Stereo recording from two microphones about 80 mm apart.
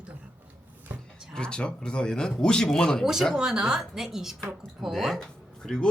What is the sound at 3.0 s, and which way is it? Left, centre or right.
A woman's voice, centre.